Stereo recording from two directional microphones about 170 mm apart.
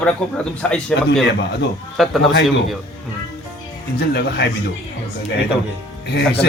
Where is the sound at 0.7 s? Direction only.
5° left (ahead or behind).